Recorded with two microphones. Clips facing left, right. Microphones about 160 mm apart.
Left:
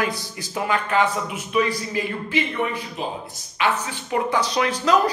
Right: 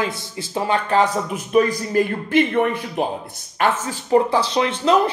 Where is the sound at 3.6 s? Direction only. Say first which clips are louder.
Right 3 dB; 45° right (ahead or behind); by 5.0 s 25° right (ahead or behind).